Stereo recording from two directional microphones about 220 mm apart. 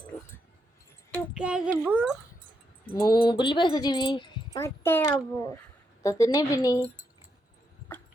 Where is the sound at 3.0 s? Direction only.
20° left (ahead or behind).